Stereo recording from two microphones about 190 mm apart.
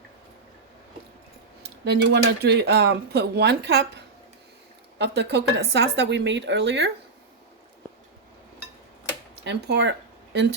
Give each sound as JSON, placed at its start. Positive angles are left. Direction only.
{"t": 1.8, "sound": "speech", "side_deg": -65}
{"t": 9.4, "sound": "speech", "side_deg": -65}